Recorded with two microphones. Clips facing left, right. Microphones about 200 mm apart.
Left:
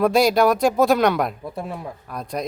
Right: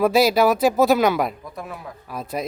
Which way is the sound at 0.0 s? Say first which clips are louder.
Even; 5° right (ahead or behind).